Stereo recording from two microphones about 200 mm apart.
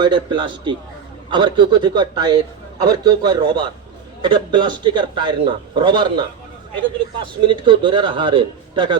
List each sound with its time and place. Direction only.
0.0 s a man's voice: 25° right (ahead or behind)
7.4 s a man's voice: 25° right (ahead or behind)